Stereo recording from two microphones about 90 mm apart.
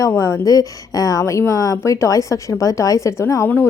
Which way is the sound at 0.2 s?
35° left (ahead or behind).